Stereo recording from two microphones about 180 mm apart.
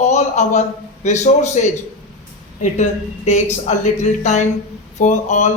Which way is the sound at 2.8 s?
40° left (ahead or behind).